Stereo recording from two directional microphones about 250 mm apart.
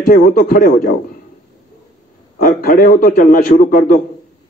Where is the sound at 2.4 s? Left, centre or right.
Left.